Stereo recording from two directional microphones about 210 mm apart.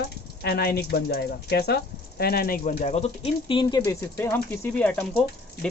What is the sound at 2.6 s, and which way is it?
Speech, 35° left (ahead or behind).